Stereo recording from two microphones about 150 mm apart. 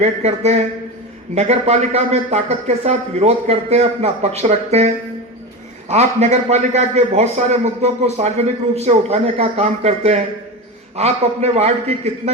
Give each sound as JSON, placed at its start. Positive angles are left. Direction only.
{"t": 0.0, "sound": "a man's voice", "side_deg": -45}
{"t": 5.9, "sound": "a man's voice", "side_deg": -45}